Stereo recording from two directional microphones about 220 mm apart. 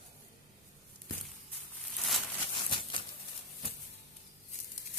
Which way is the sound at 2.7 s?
20° left (ahead or behind).